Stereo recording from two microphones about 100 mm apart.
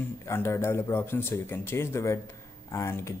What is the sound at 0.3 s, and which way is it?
Speech, 25° left (ahead or behind).